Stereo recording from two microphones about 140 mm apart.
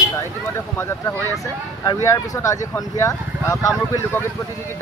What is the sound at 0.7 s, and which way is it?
Speech, 15° left (ahead or behind).